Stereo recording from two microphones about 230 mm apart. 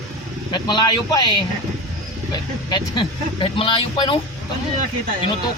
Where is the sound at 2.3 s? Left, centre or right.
Centre.